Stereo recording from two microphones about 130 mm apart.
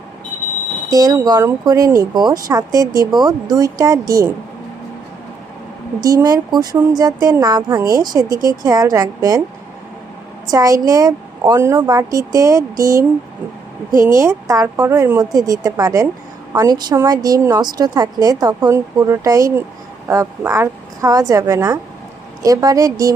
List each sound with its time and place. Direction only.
0.9 s a woman's voice: 30° right (ahead or behind)
6.0 s a woman's voice: 30° right (ahead or behind)
10.5 s a woman's voice: 25° right (ahead or behind)
15.2 s a woman's voice: 30° right (ahead or behind)